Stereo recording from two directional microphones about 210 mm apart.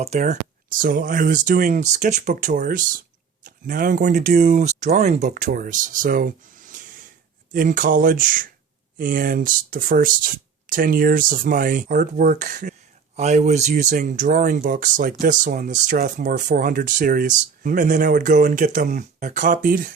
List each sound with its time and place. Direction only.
0.0 s speech: 35° right (ahead or behind)